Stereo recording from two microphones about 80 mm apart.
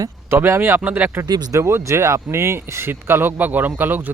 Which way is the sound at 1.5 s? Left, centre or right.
Right.